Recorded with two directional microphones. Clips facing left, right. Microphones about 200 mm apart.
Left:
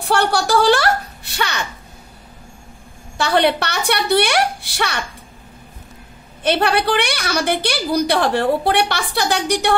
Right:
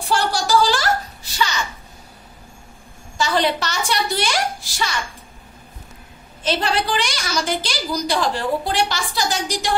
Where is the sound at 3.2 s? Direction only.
60° left (ahead or behind).